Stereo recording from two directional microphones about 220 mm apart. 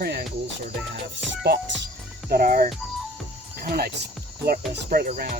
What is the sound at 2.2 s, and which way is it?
Speech, 40° right (ahead or behind).